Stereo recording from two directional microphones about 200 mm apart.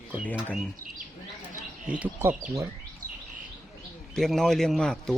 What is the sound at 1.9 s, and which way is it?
Speech, 10° right (ahead or behind).